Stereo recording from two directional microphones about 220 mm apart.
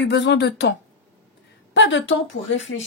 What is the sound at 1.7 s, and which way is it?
Speech, 60° left (ahead or behind).